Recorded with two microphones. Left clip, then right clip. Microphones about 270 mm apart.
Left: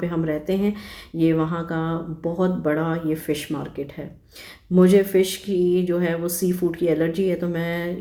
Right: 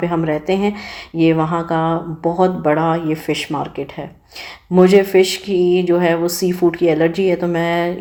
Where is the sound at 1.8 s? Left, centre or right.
Right.